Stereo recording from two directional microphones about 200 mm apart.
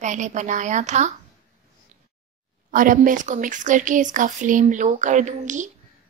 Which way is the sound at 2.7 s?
40° right (ahead or behind).